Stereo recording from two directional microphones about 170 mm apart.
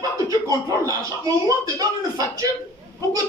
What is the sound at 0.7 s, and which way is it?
Speech, 20° right (ahead or behind).